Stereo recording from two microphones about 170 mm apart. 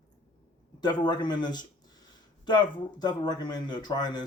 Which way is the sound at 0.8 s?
25° left (ahead or behind).